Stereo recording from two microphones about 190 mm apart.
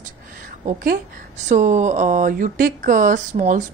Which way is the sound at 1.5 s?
40° right (ahead or behind).